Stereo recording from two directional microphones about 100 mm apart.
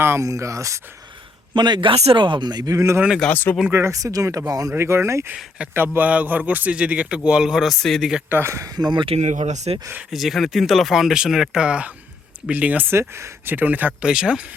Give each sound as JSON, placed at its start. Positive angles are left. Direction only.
{"t": 0.0, "sound": "speech", "side_deg": -30}
{"t": 1.5, "sound": "a man's voice", "side_deg": -50}
{"t": 2.1, "sound": "speech", "side_deg": -55}
{"t": 2.7, "sound": "speech", "side_deg": -30}
{"t": 3.3, "sound": "speech", "side_deg": 20}
{"t": 3.7, "sound": "speech", "side_deg": -25}
{"t": 4.7, "sound": "a man's voice", "side_deg": -25}
{"t": 8.3, "sound": "speech", "side_deg": -25}
{"t": 9.0, "sound": "speech", "side_deg": -90}
{"t": 10.1, "sound": "a man's voice", "side_deg": 0}